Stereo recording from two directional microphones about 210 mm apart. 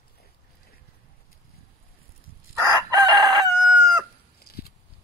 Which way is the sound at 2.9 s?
20° right (ahead or behind).